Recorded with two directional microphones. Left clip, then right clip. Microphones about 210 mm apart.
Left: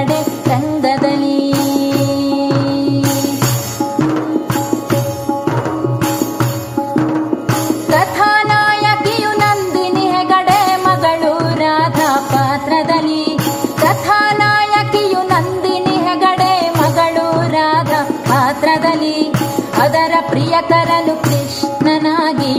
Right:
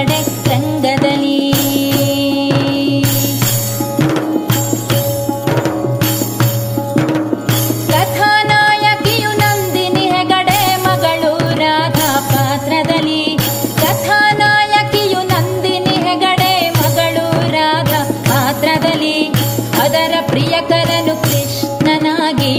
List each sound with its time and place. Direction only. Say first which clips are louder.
0.8 s music: right 2 dB; 5° right (ahead or behind)
7.9 s music: even; 5° right (ahead or behind)